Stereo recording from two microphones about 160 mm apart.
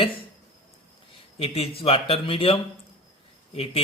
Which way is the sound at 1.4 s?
40° left (ahead or behind).